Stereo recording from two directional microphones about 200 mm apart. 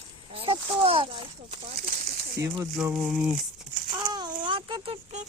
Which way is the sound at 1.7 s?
50° right (ahead or behind).